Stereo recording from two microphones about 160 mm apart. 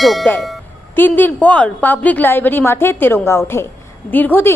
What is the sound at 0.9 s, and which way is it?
A woman's voice, 10° left (ahead or behind).